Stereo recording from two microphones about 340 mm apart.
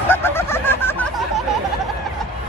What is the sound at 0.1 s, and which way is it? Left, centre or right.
Goose, centre.